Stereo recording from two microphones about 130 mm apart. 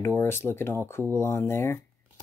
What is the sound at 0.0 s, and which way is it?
Speech, 20° left (ahead or behind).